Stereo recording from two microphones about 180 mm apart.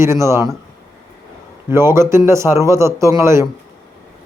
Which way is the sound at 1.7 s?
15° right (ahead or behind).